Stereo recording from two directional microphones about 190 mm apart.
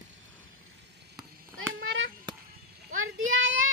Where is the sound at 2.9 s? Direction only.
90° right.